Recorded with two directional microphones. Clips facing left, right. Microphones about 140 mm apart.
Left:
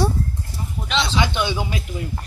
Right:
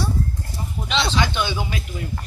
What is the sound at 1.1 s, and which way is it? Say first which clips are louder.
Speech: left 1 dB; 20° left (ahead or behind).